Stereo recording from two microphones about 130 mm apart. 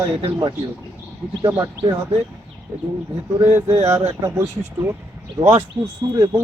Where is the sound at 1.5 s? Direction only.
25° right (ahead or behind).